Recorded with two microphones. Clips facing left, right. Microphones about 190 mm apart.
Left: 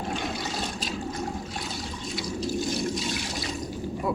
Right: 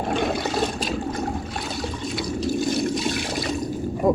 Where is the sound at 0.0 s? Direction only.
60° right (ahead or behind).